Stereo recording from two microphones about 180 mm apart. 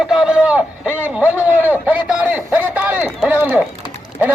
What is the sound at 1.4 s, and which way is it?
Run, 10° right (ahead or behind).